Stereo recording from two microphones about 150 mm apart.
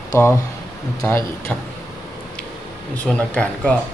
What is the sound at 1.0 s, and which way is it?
Speech, 15° left (ahead or behind).